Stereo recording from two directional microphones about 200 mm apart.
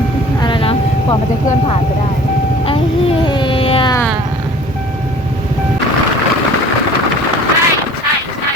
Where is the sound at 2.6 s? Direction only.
25° left (ahead or behind).